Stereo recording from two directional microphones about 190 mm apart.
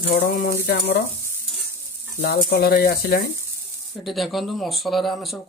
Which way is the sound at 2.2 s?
55° left (ahead or behind).